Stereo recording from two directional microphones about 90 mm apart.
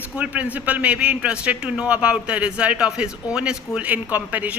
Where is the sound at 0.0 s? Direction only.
15° right (ahead or behind).